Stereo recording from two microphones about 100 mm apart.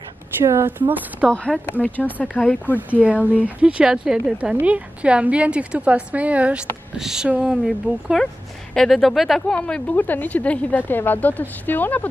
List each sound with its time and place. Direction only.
0.4 s a woman's voice: 25° right (ahead or behind)
1.3 s speech: 10° left (ahead or behind)
2.9 s a woman's voice: 15° right (ahead or behind)
9.6 s speech: 15° left (ahead or behind)